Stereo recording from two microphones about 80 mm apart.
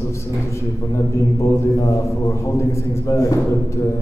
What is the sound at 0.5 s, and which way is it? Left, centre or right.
A man's voice, left.